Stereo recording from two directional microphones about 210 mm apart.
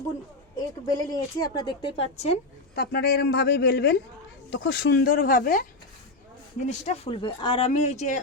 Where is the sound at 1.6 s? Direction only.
25° left (ahead or behind).